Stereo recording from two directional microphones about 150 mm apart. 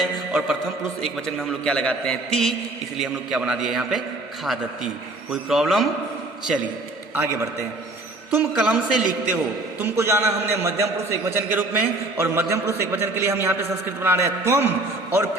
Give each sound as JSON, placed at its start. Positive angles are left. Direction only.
{"t": 0.0, "sound": "music", "side_deg": -5}
{"t": 1.6, "sound": "a man's voice", "side_deg": 10}
{"t": 5.3, "sound": "a man's voice", "side_deg": 0}
{"t": 7.2, "sound": "a man's voice", "side_deg": -20}
{"t": 8.4, "sound": "a man's voice", "side_deg": -5}